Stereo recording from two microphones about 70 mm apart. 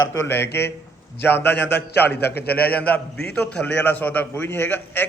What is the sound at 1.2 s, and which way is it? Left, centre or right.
A man's voice, left.